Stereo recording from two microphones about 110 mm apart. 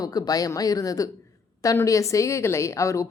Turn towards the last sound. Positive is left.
turn(degrees=30)  # may be behind; listen again after turning